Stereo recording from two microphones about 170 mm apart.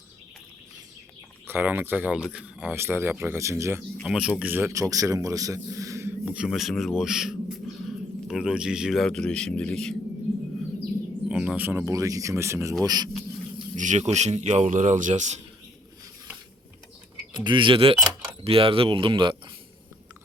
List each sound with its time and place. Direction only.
1.5 s speech: 10° right (ahead or behind)
3.9 s a man's voice: centre (ahead or behind)
11.3 s speech: 5° right (ahead or behind); by 13.1 s 20° right (ahead or behind)
13.7 s speech: 45° right (ahead or behind)
17.3 s speech: 25° right (ahead or behind)